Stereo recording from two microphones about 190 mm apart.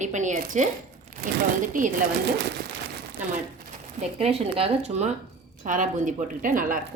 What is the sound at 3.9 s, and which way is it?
A woman's voice, 35° right (ahead or behind).